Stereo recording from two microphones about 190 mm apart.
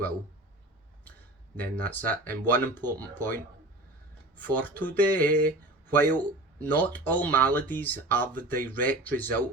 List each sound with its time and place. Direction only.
1.5 s speech: 10° left (ahead or behind)
4.4 s speech: 10° left (ahead or behind)